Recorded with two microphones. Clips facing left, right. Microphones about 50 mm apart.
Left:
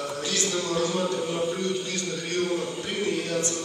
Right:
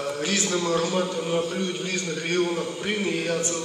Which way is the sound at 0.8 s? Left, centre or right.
Right.